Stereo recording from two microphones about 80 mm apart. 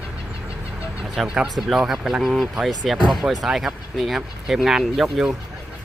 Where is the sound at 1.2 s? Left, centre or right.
Centre.